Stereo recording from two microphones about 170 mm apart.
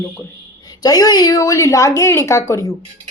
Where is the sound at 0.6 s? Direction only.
20° left (ahead or behind).